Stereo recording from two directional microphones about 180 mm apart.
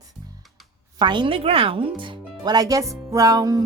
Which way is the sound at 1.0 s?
25° right (ahead or behind).